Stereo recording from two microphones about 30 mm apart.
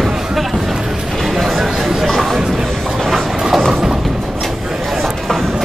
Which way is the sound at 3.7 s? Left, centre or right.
Centre.